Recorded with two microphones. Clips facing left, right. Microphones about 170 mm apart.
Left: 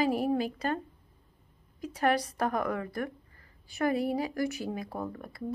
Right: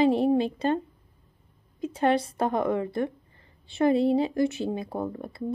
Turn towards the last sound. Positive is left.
turn(degrees=-25)  # may be behind; listen again after turning